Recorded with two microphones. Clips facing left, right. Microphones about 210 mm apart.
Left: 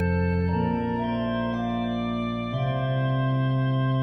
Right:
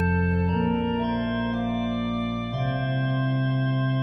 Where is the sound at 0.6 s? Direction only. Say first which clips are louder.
Right 3 dB; 5° left (ahead or behind).